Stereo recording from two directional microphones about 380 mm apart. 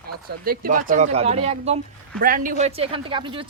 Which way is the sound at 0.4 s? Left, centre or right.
Right.